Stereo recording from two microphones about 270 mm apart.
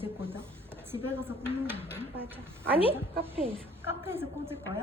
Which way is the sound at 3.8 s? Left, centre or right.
Centre.